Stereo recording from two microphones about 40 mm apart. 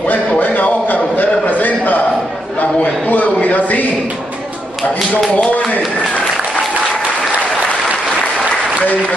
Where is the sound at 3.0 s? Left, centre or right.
Left.